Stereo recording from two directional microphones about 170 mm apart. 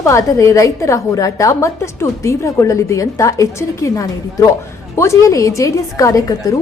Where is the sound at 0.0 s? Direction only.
20° left (ahead or behind).